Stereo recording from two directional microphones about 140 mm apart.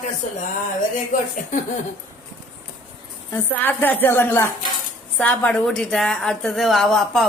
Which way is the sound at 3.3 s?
15° left (ahead or behind).